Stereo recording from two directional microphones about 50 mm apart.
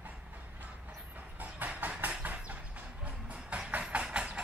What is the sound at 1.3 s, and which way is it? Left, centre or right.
Train, right.